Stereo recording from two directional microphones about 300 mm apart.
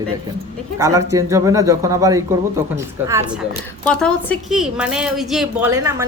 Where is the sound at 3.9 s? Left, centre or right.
Centre.